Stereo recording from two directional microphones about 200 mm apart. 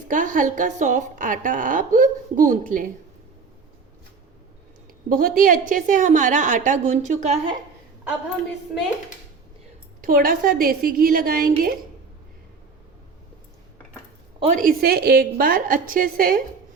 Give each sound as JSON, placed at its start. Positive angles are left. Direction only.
{"t": 0.1, "sound": "a woman's voice", "side_deg": -40}
{"t": 5.0, "sound": "a woman's voice", "side_deg": -45}
{"t": 10.0, "sound": "a woman's voice", "side_deg": -45}
{"t": 14.3, "sound": "a woman's voice", "side_deg": -30}
{"t": 14.6, "sound": "a woman's voice", "side_deg": -45}